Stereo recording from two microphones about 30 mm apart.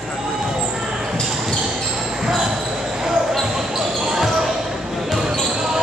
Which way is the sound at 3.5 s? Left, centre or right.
Centre.